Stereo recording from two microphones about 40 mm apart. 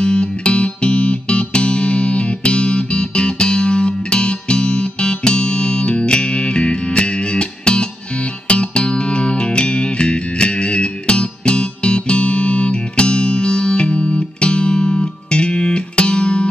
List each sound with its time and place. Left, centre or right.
0.0 s music: left